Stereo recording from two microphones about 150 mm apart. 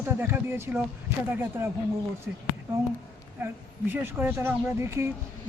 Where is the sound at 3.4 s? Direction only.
15° right (ahead or behind).